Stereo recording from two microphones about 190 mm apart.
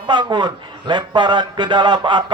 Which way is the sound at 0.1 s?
25° right (ahead or behind).